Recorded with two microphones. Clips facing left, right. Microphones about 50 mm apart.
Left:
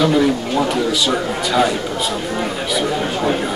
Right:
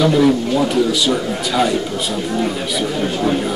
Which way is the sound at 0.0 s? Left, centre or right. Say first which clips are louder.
Right 2 dB; centre.